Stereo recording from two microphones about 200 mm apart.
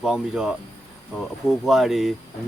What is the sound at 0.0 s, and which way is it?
A man's voice, 5° right (ahead or behind).